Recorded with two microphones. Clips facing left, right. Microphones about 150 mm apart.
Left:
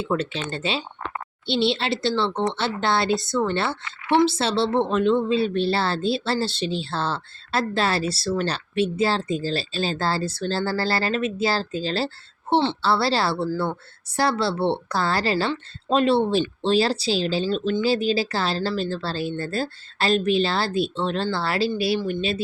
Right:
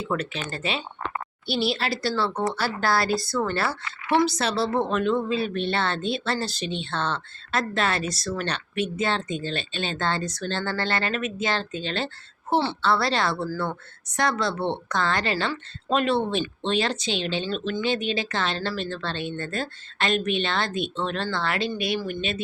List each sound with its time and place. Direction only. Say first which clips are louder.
0.0 s a woman's voice: left 3 dB; 25° left (ahead or behind)